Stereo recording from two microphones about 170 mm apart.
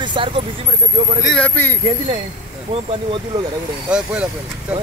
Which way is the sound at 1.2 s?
5° left (ahead or behind).